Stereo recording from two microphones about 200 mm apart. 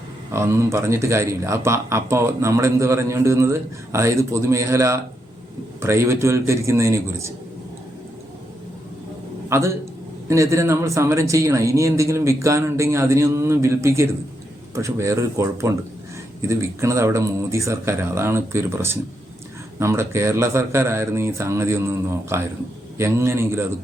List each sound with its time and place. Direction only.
0.3 s speech: 15° right (ahead or behind)
9.5 s speech: 15° right (ahead or behind)